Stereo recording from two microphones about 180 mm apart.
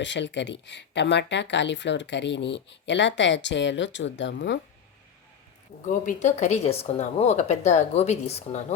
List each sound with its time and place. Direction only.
0.0 s speech: 85° left
5.9 s speech: 45° left (ahead or behind)